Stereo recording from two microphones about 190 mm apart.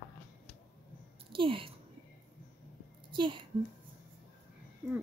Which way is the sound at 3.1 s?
25° right (ahead or behind).